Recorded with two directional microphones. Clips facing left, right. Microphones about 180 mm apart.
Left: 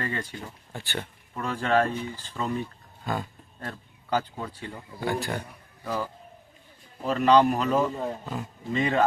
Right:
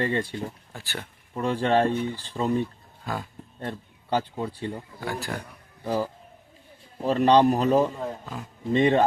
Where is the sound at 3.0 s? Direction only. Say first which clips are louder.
Left 2 dB; centre (ahead or behind).